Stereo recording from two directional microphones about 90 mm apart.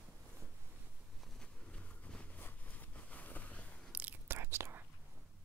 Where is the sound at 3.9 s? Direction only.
20° right (ahead or behind).